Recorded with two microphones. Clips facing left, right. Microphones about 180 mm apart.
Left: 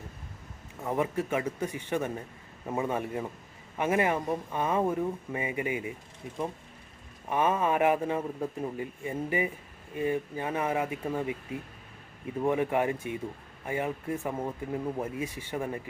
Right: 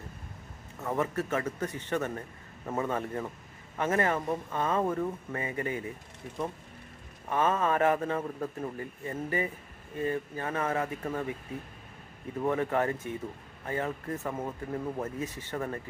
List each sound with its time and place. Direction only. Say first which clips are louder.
0.9 s a man's voice: left 1 dB; 15° left (ahead or behind)
7.3 s a man's voice: left 1 dB; 15° left (ahead or behind)
12.4 s a man's voice: left 1 dB; 15° left (ahead or behind)